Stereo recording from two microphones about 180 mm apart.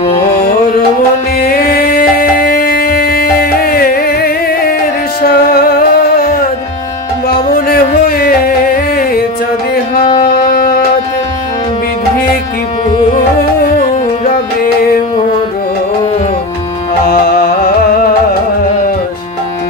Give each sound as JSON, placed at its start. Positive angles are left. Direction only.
{"t": 1.5, "sound": "music", "side_deg": 55}
{"t": 7.3, "sound": "music", "side_deg": 55}
{"t": 13.7, "sound": "music", "side_deg": 45}
{"t": 17.1, "sound": "music", "side_deg": 55}